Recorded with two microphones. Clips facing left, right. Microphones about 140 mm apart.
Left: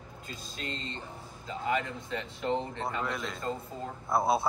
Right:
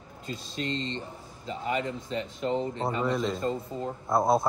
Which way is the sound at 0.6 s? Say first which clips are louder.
Right 8 dB; 30° right (ahead or behind).